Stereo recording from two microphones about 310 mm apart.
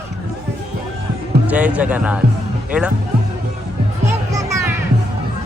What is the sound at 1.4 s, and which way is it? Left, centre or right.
Speech, centre.